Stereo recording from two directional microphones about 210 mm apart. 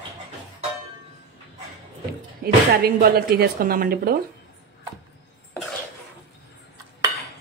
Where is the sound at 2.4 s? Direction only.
45° right (ahead or behind).